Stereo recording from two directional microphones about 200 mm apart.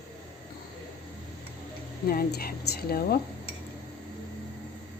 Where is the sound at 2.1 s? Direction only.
50° left (ahead or behind).